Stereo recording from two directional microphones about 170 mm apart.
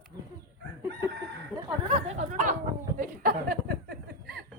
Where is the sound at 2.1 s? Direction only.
45° right (ahead or behind).